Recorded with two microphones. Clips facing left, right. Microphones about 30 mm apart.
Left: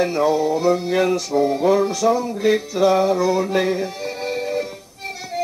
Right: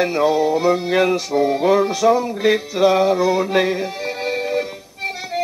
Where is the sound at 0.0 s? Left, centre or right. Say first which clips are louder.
Right 1 dB; centre.